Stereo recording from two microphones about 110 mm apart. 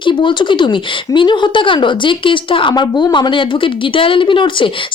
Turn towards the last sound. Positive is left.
turn(degrees=50)  # may be behind; listen again after turning